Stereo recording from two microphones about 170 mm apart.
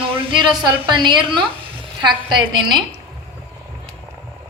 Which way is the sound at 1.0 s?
30° right (ahead or behind).